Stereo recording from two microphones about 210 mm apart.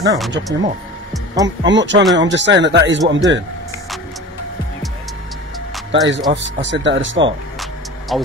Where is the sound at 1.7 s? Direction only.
60° right (ahead or behind).